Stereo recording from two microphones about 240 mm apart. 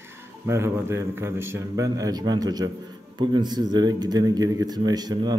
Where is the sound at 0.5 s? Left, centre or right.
Centre.